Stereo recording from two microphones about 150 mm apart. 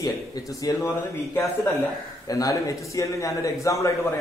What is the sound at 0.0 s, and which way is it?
Speech, 25° left (ahead or behind).